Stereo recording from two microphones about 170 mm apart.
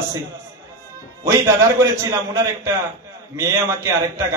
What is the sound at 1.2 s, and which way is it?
A man's voice, 15° right (ahead or behind).